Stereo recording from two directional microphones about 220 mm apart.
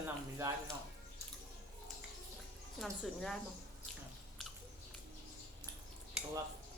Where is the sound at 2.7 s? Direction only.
Centre (ahead or behind).